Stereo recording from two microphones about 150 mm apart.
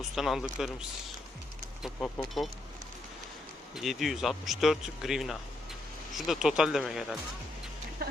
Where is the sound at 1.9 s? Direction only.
5° left (ahead or behind).